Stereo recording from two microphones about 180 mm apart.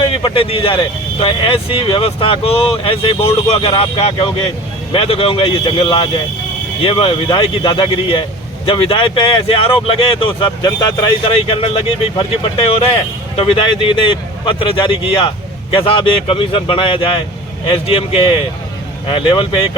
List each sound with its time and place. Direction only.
0.0 s speech: 30° left (ahead or behind)